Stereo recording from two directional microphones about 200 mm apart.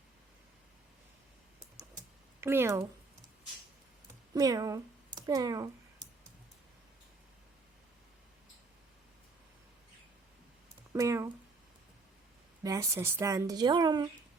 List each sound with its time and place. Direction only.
2.4 s speech: 10° right (ahead or behind)
4.4 s a sound: 20° right (ahead or behind)
10.9 s speech: 15° right (ahead or behind)
12.6 s speech: 15° right (ahead or behind)